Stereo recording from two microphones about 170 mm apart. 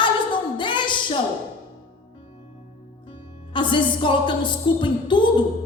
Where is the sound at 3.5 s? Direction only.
30° left (ahead or behind).